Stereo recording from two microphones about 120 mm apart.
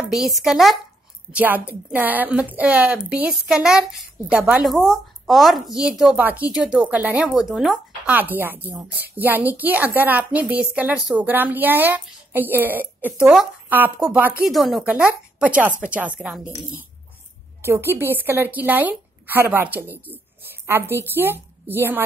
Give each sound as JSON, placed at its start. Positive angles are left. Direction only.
{"t": 0.0, "sound": "a sound", "side_deg": -5}
{"t": 0.4, "sound": "speech", "side_deg": 0}
{"t": 1.3, "sound": "a woman's voice", "side_deg": -15}
{"t": 4.6, "sound": "a woman's voice", "side_deg": 0}
{"t": 7.3, "sound": "speech", "side_deg": -5}
{"t": 8.1, "sound": "a woman's voice", "side_deg": -15}
{"t": 14.9, "sound": "a woman's voice", "side_deg": -10}
{"t": 17.6, "sound": "a woman's voice", "side_deg": -20}